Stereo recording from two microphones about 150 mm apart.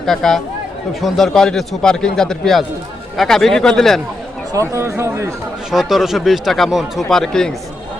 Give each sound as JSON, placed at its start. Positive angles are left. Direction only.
{"t": 0.0, "sound": "speech", "side_deg": 5}
{"t": 4.7, "sound": "speech", "side_deg": -20}
{"t": 5.7, "sound": "speech", "side_deg": 0}